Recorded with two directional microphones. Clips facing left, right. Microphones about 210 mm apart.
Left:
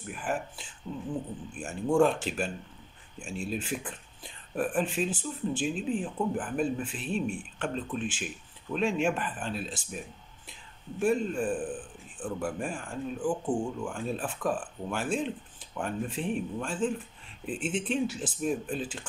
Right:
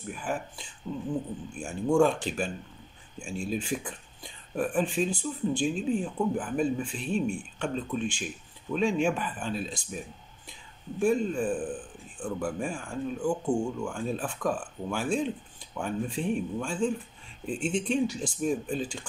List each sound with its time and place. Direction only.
0.0 s a man's voice: 5° left (ahead or behind)
11.0 s a man's voice: 5° left (ahead or behind)